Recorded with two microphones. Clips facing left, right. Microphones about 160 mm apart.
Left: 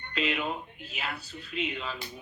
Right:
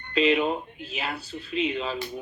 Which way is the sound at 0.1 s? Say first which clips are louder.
Right 9 dB; 25° right (ahead or behind).